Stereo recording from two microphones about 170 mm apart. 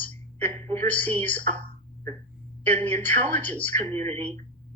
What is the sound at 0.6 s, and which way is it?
Speech, 45° right (ahead or behind).